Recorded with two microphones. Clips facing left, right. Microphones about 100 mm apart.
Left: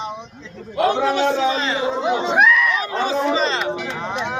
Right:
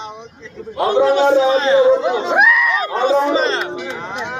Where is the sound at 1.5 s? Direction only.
35° right (ahead or behind).